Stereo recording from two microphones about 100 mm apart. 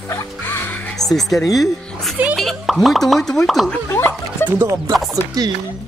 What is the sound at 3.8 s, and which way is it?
Music, 25° left (ahead or behind).